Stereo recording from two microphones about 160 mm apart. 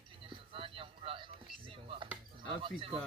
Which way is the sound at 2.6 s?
35° right (ahead or behind).